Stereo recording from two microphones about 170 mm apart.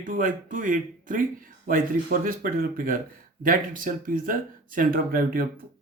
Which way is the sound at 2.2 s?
55° right (ahead or behind).